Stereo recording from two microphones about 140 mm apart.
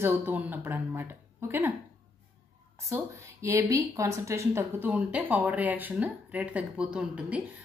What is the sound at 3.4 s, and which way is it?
Speech, 20° right (ahead or behind).